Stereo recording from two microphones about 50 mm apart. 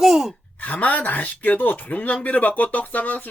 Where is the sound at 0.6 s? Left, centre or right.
Left.